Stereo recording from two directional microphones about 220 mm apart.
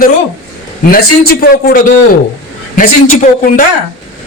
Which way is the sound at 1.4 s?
45° left (ahead or behind).